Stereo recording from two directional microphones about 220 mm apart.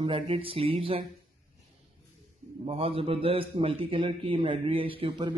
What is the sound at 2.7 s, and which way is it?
A man's voice, 25° right (ahead or behind).